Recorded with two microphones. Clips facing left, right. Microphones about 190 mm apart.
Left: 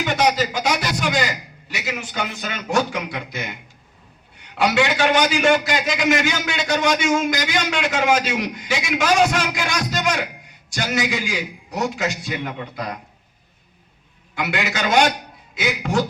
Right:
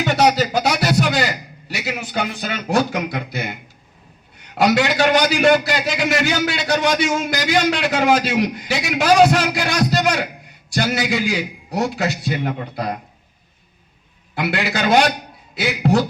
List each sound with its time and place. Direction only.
0.0 s a man's voice: 40° right (ahead or behind)
14.3 s a man's voice: 35° right (ahead or behind)